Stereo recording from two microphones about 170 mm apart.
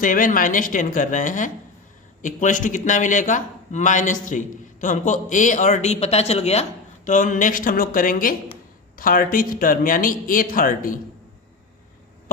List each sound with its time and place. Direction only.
0.0 s a man's voice: 50° left (ahead or behind)